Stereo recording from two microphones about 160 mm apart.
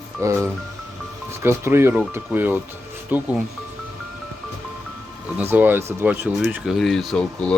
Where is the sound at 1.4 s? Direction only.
15° right (ahead or behind).